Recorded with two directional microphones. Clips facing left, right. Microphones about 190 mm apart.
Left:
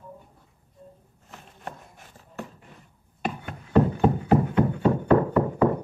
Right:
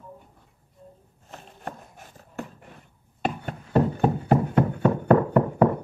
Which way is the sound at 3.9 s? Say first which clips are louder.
Left 1 dB; 45° right (ahead or behind).